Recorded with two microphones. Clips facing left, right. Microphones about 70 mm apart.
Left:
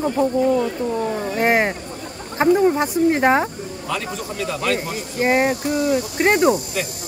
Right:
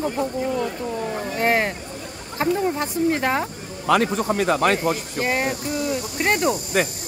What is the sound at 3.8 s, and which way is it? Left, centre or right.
A man's voice, right.